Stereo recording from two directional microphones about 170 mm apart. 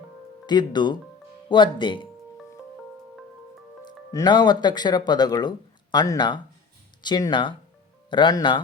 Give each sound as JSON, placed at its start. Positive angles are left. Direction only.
{"t": 0.4, "sound": "speech", "side_deg": 25}
{"t": 4.1, "sound": "speech", "side_deg": 25}